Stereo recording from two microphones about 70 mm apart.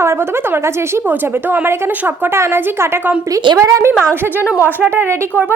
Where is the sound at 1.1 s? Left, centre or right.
Right.